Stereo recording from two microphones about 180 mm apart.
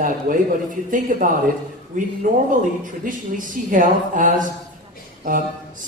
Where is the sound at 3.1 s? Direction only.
45° right (ahead or behind).